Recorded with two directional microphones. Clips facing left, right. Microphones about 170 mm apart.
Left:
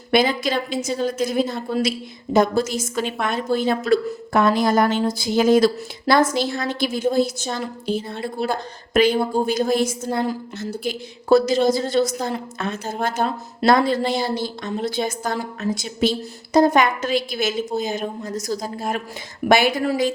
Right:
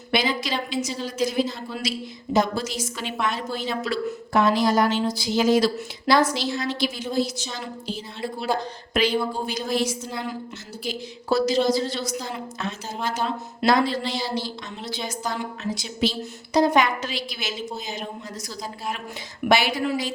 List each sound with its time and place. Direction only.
0.1 s a woman's voice: 50° left (ahead or behind)